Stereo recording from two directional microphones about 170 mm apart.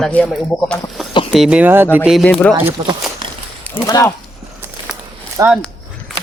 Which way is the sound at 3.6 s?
15° left (ahead or behind).